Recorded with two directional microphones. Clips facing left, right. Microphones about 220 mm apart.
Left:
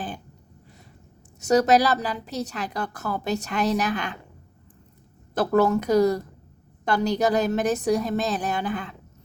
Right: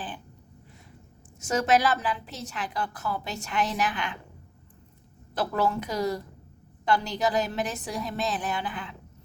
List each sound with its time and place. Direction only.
1.5 s a woman's voice: 40° left (ahead or behind)
5.3 s a woman's voice: 45° left (ahead or behind)